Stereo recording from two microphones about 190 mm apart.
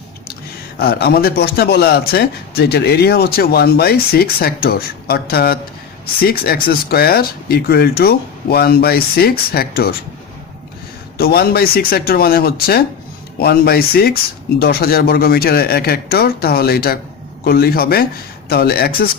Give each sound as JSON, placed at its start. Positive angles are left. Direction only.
{"t": 0.8, "sound": "speech", "side_deg": 55}
{"t": 11.2, "sound": "speech", "side_deg": 55}